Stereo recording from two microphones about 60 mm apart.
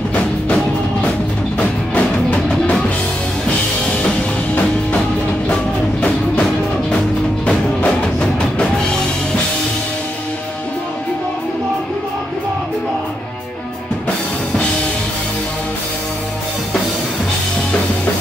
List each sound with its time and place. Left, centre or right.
2.0 s music: left
5.5 s music: left
7.4 s music: centre